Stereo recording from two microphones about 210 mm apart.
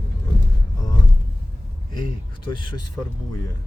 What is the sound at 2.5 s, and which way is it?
Speech, 20° left (ahead or behind).